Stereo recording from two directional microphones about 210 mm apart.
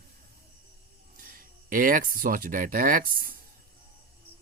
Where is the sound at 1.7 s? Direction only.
40° right (ahead or behind).